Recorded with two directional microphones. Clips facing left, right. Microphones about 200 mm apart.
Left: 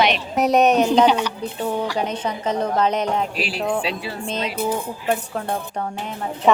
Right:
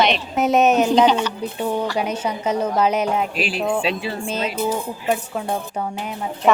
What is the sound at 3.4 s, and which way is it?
Speech, 20° right (ahead or behind).